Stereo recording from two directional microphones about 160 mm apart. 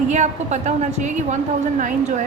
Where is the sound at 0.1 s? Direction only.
45° right (ahead or behind).